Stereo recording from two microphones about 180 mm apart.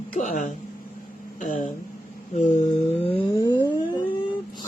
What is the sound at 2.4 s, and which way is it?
Humming, 40° left (ahead or behind).